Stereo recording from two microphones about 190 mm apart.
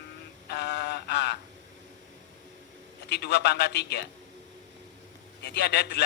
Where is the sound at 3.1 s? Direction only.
60° left (ahead or behind).